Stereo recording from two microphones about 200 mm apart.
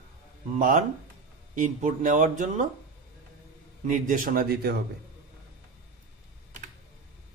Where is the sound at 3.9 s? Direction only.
40° right (ahead or behind).